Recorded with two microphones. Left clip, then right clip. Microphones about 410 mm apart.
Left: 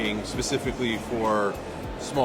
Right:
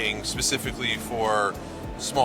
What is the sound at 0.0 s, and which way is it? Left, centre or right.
Speech, right.